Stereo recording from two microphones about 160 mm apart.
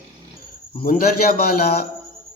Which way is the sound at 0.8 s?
65° left (ahead or behind).